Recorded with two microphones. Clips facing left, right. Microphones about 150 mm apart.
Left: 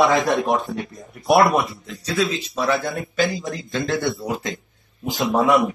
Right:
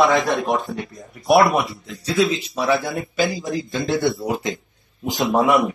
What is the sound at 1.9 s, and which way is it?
Speech, 20° right (ahead or behind).